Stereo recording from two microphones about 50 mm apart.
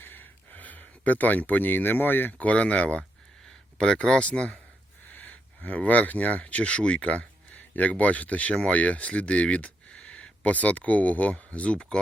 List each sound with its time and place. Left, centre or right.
0.0 s a sound: left
2.5 s speech: left
5.1 s speech: left